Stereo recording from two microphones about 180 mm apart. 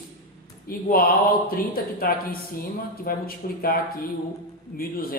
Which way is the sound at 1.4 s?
55° left (ahead or behind).